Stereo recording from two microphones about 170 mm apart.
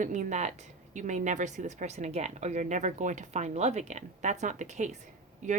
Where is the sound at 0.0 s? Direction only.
45° right (ahead or behind).